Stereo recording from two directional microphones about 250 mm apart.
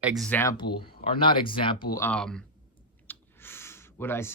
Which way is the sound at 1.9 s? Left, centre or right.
Centre.